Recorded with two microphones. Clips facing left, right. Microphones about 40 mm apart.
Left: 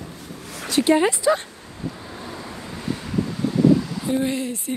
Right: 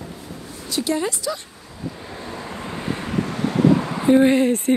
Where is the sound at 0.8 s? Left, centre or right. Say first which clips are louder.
Left 5 dB; left.